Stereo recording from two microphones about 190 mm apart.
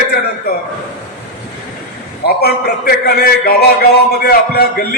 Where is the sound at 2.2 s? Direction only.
55° left (ahead or behind).